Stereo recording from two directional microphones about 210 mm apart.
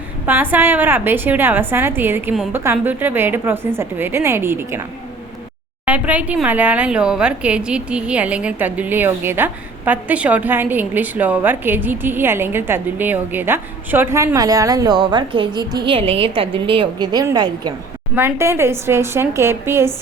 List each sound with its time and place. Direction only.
0.3 s speech: 10° right (ahead or behind)